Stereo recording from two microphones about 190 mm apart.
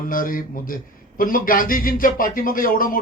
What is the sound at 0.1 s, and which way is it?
A man's voice, 45° left (ahead or behind).